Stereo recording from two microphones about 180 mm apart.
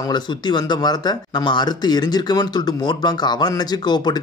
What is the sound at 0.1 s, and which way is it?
A man's voice, 25° left (ahead or behind).